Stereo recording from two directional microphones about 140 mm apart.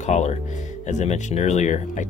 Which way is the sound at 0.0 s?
55° left (ahead or behind).